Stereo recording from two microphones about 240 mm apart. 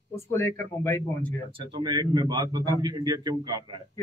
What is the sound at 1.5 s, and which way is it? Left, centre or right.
A man's voice, centre.